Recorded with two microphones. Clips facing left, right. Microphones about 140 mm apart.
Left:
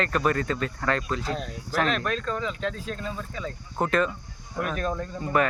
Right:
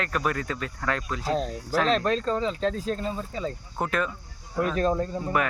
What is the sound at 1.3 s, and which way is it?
Speech, 40° right (ahead or behind).